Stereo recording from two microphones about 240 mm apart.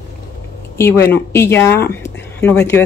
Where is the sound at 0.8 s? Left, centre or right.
Centre.